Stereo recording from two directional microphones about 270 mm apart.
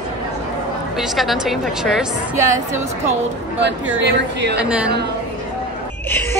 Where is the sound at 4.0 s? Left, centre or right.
Right.